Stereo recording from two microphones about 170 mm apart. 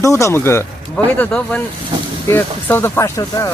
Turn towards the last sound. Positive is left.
turn(degrees=20)  # may be behind; listen again after turning